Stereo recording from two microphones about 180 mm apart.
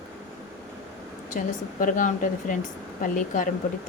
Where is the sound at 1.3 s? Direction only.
45° left (ahead or behind).